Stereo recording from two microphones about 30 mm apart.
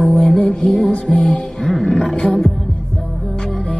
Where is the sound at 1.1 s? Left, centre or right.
Left.